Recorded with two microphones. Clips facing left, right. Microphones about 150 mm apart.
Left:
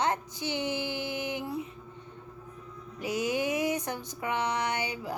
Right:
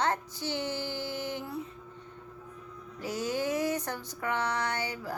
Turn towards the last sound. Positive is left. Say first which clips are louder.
# left 2 dB
turn(degrees=15)  # may be behind; listen again after turning